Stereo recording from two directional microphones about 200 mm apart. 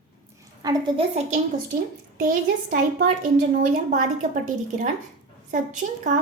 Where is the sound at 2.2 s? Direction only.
40° right (ahead or behind).